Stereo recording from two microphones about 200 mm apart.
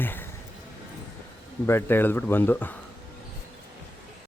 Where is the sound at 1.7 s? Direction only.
10° left (ahead or behind).